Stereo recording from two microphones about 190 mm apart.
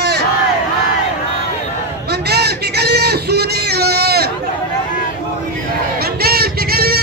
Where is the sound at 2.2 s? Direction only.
60° right (ahead or behind).